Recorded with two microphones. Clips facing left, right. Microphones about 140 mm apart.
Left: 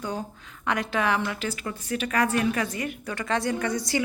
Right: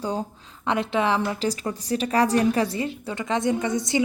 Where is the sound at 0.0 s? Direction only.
30° right (ahead or behind).